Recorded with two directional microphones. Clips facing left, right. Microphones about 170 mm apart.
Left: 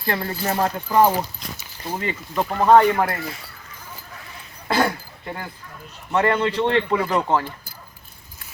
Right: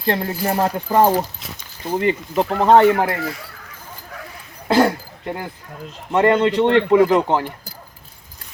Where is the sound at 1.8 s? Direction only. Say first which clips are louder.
Right 8 dB; 15° right (ahead or behind).